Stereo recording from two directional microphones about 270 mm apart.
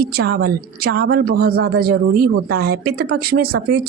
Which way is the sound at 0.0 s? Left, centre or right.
Right.